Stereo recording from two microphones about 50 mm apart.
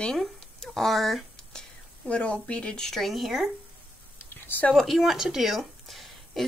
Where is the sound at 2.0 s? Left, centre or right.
Left.